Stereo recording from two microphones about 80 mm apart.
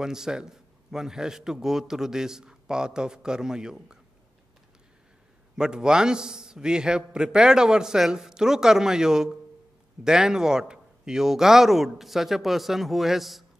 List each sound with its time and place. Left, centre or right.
0.0 s a man's voice: centre
5.6 s a man's voice: centre